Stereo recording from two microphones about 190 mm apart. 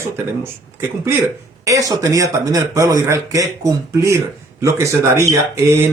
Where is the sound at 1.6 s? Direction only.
15° right (ahead or behind).